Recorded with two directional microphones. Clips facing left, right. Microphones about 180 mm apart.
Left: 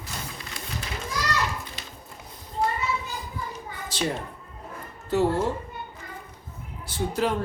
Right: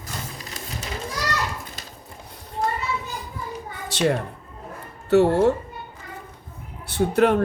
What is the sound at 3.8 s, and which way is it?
Cat, 70° right (ahead or behind).